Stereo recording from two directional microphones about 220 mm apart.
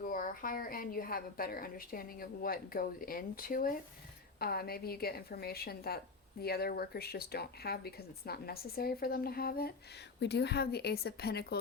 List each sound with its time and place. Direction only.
0.0 s a woman's voice: 40° left (ahead or behind)